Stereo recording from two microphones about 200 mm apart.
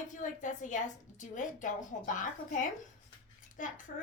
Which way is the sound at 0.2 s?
40° left (ahead or behind).